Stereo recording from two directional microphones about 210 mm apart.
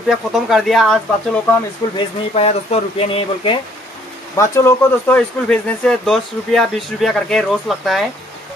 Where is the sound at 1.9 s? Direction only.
25° left (ahead or behind).